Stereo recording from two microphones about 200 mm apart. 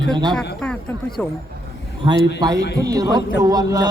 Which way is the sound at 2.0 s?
20° right (ahead or behind).